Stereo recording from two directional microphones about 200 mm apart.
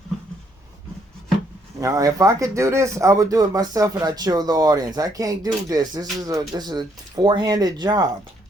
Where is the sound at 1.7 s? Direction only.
15° right (ahead or behind).